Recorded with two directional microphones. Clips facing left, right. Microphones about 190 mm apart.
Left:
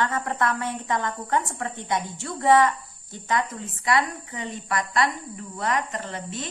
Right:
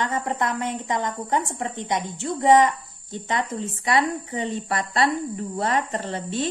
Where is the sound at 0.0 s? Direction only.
20° right (ahead or behind).